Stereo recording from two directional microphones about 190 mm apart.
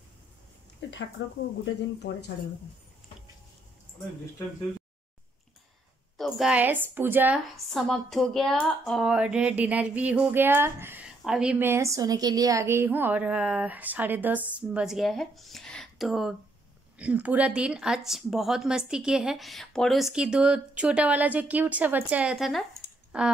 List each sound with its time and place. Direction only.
1.2 s speech: 75° left (ahead or behind)
2.0 s speech: 60° left (ahead or behind)
6.1 s a woman's voice: centre (ahead or behind)